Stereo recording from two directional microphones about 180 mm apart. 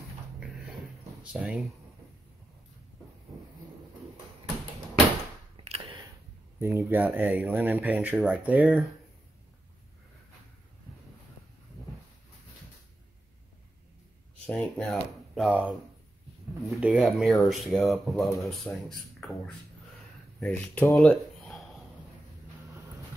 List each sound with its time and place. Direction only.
1.2 s speech: 5° right (ahead or behind)
5.6 s a sound: 30° right (ahead or behind)
6.6 s speech: 15° right (ahead or behind)
14.4 s speech: 5° left (ahead or behind)